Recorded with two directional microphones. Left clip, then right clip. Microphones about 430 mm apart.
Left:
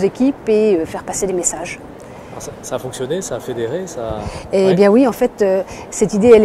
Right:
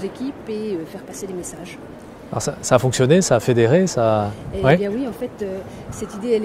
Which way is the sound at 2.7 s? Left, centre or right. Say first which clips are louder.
Right 7 dB; right.